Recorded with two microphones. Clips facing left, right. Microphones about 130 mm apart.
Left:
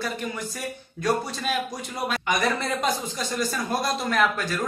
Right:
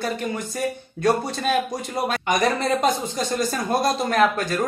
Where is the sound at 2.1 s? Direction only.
45° right (ahead or behind).